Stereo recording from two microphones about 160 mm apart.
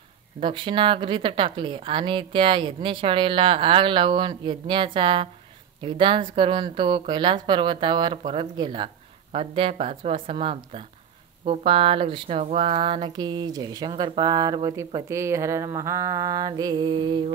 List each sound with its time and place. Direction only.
0.4 s speech: 30° right (ahead or behind)